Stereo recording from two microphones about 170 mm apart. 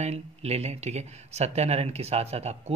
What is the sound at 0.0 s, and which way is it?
Speech, 40° right (ahead or behind).